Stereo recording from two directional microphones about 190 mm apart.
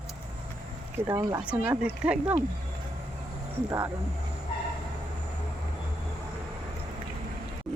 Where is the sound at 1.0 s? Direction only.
10° right (ahead or behind).